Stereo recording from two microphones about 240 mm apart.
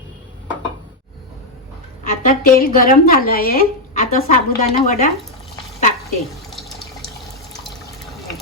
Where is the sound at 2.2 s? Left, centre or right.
Left.